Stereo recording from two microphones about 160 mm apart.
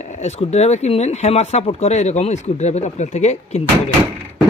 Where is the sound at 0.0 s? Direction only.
45° left (ahead or behind).